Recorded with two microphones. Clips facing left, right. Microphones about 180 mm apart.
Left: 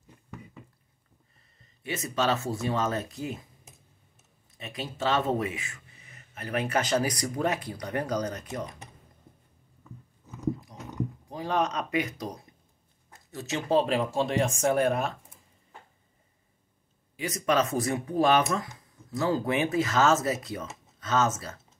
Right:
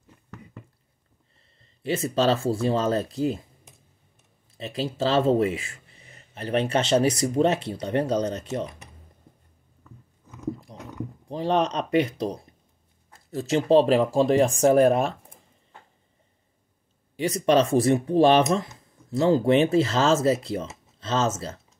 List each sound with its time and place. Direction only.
1.6 s speech: 30° right (ahead or behind)
4.6 s speech: 30° right (ahead or behind)
11.2 s speech: 30° right (ahead or behind)
13.1 s a sound: 30° right (ahead or behind)
13.7 s speech: 35° right (ahead or behind)
17.2 s speech: 30° right (ahead or behind)